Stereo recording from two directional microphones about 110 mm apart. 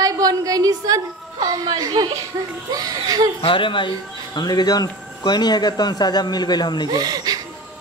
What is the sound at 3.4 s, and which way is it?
Speech, 50° left (ahead or behind).